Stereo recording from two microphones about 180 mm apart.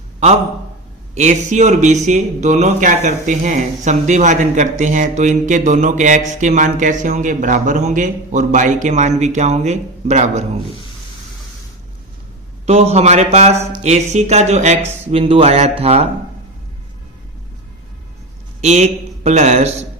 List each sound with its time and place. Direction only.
1.1 s speech: 40° right (ahead or behind)
12.6 s speech: 35° right (ahead or behind)
18.6 s speech: 40° right (ahead or behind)